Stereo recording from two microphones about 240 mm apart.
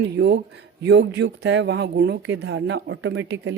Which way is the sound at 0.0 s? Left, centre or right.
Right.